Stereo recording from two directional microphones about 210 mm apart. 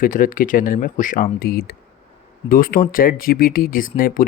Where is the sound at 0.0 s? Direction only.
40° left (ahead or behind).